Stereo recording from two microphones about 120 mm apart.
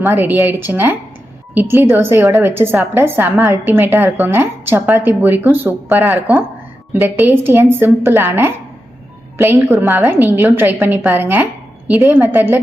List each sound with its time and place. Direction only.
0.0 s a woman's voice: 15° right (ahead or behind)
9.7 s a woman's voice: 25° right (ahead or behind)